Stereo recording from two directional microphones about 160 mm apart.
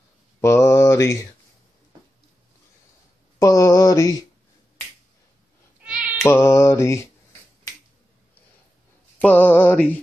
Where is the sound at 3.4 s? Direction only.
20° left (ahead or behind).